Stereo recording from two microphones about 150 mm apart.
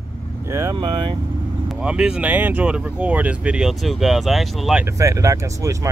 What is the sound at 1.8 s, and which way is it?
Speech, 5° right (ahead or behind).